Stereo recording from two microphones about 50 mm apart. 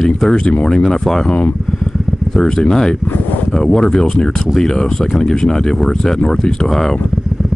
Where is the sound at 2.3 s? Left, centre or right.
Centre.